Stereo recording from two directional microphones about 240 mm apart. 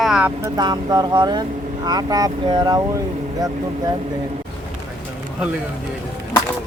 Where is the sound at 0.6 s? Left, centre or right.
Centre.